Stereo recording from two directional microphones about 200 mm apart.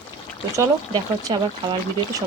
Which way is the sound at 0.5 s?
15° right (ahead or behind).